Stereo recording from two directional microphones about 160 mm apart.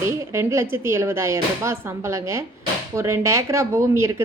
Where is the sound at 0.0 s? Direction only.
15° right (ahead or behind).